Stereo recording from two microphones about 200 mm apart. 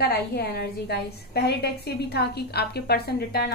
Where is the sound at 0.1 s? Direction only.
50° left (ahead or behind).